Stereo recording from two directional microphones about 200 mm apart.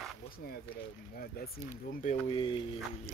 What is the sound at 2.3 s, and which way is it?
Speech, 25° left (ahead or behind).